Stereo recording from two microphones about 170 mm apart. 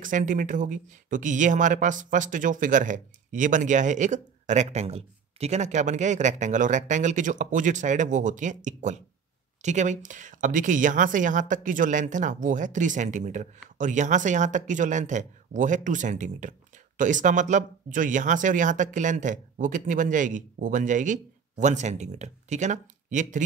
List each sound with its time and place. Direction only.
0.0 s speech: 50° right (ahead or behind)